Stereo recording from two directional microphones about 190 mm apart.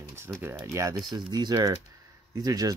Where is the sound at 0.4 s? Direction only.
10° right (ahead or behind).